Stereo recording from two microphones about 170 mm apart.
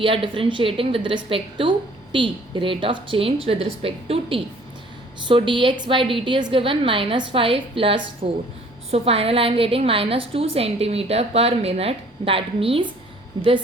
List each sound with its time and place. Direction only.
0.0 s a woman's voice: 30° right (ahead or behind)